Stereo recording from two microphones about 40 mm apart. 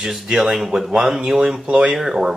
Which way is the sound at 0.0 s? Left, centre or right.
Centre.